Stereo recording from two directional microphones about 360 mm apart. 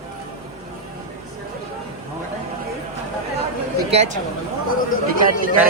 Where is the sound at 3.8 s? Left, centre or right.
Centre.